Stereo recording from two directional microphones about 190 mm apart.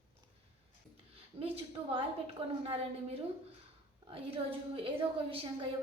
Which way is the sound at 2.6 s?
30° right (ahead or behind).